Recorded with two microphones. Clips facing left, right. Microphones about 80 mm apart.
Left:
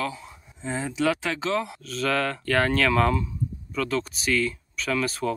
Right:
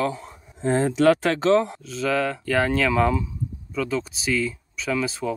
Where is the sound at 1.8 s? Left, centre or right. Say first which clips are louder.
Right 2 dB; centre.